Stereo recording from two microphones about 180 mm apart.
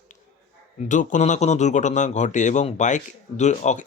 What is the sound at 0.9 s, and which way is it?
Speech, 45° left (ahead or behind).